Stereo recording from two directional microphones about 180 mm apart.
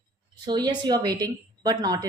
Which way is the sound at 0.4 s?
25° right (ahead or behind).